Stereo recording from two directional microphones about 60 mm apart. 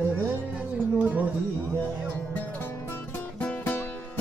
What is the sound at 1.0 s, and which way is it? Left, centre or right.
Speech, right.